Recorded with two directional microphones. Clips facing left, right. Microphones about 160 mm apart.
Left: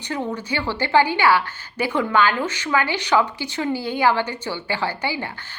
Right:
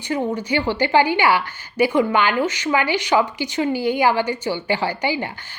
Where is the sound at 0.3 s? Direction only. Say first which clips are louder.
Right 5 dB; 15° right (ahead or behind).